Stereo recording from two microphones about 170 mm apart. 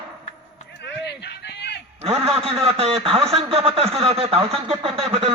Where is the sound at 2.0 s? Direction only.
35° right (ahead or behind).